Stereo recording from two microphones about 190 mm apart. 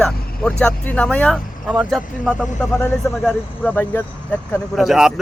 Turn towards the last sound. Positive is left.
turn(degrees=0)  # may be behind; listen again after turning